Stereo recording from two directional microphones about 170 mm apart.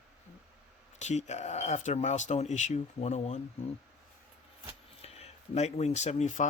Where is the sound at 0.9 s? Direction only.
40° left (ahead or behind).